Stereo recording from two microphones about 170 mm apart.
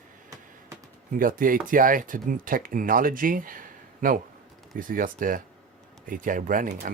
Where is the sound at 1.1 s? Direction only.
55° right (ahead or behind).